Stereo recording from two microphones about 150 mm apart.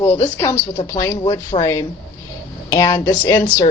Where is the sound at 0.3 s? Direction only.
15° left (ahead or behind).